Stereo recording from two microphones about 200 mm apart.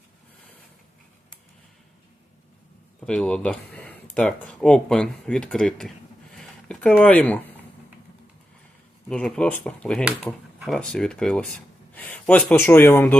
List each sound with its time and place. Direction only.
3.1 s speech: 5° left (ahead or behind)
6.3 s a sound: 5° left (ahead or behind)
9.0 s speech: 5° left (ahead or behind)